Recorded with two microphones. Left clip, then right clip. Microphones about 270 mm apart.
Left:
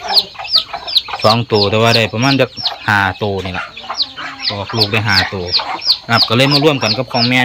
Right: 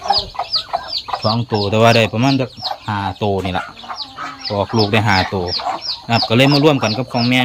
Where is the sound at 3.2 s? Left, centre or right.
Centre.